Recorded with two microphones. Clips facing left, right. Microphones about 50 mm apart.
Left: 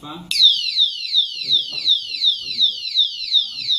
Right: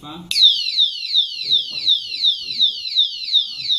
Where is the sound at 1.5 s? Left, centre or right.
Centre.